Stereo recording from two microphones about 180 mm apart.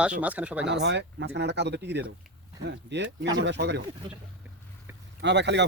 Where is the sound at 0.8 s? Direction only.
75° right (ahead or behind).